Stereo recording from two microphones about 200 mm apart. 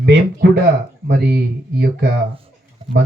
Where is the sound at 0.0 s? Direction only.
55° right (ahead or behind).